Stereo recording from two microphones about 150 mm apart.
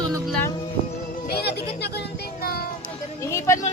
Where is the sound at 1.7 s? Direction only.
90° left.